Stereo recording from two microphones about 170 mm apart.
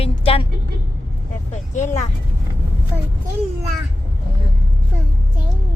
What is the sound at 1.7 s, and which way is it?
Speech, 45° left (ahead or behind).